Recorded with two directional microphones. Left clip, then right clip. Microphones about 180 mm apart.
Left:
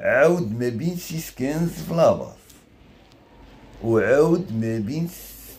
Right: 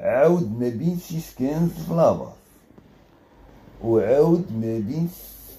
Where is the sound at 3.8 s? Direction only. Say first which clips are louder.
Even; 15° left (ahead or behind).